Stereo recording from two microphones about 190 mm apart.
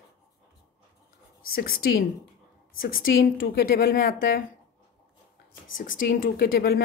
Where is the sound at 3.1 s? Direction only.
50° left (ahead or behind).